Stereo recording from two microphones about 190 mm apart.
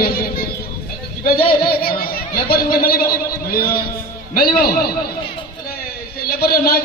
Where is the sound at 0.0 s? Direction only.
55° left (ahead or behind).